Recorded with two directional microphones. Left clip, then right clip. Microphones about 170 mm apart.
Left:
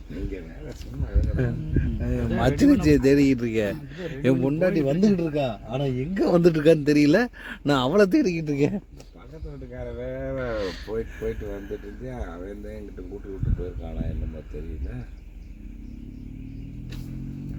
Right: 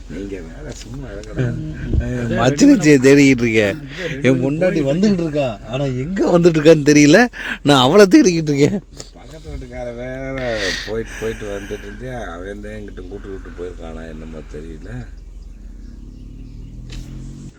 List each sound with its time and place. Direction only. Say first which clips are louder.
2.3 s speech: right 8 dB; 25° right (ahead or behind)
4.4 s speech: right 6 dB; 5° right (ahead or behind)
4.8 s speech: right 5 dB; 15° right (ahead or behind); by 9.0 s 50° right (ahead or behind)
10.3 s speech: right 11 dB; 30° right (ahead or behind)